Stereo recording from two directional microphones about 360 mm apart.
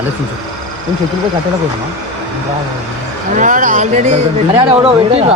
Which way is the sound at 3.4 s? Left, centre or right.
Right.